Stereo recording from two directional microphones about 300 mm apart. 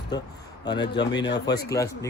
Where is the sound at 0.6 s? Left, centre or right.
Centre.